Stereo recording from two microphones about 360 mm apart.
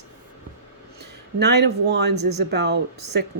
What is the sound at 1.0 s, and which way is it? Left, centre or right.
Speech, right.